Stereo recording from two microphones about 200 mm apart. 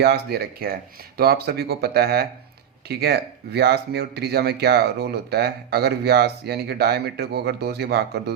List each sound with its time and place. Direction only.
0.0 s speech: 55° right (ahead or behind)